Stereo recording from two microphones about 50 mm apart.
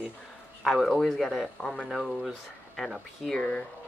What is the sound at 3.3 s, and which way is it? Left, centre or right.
Speech, left.